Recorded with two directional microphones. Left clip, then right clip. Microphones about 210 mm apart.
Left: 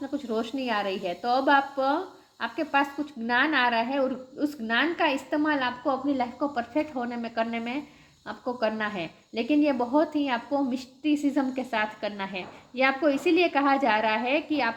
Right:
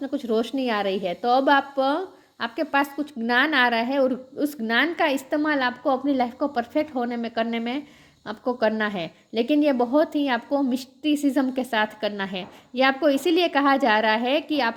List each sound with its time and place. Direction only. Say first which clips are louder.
0.0 s a woman's voice: right 5 dB; 45° right (ahead or behind)